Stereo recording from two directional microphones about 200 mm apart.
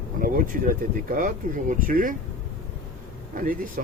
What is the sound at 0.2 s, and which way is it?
Speech, 45° right (ahead or behind).